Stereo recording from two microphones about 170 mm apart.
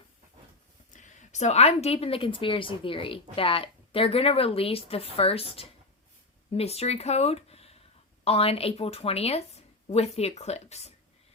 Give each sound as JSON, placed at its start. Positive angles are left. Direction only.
{"t": 0.9, "sound": "a woman's voice", "side_deg": 45}